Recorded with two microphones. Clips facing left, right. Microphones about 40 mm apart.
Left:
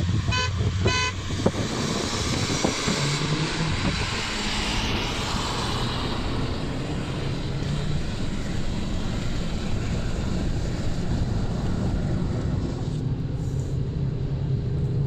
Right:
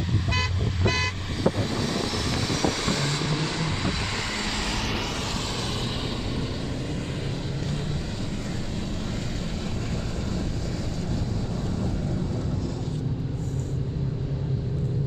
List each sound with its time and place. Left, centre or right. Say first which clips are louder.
0.3 s vehicle: left 2 dB; centre
3.3 s vehicle: left 1 dB; centre